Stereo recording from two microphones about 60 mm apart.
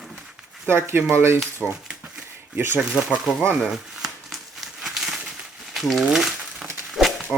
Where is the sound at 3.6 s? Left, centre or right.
Centre.